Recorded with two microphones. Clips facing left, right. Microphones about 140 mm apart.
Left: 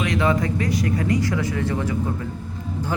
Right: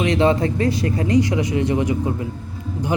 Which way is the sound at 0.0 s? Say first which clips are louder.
Right 4 dB; 25° right (ahead or behind).